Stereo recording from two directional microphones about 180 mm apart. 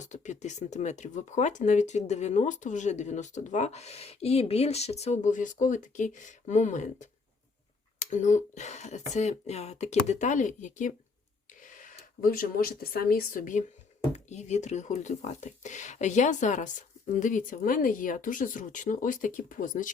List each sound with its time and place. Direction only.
0.0 s speech: 40° left (ahead or behind)